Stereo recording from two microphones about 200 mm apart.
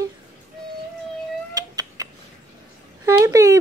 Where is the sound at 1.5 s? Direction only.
20° right (ahead or behind).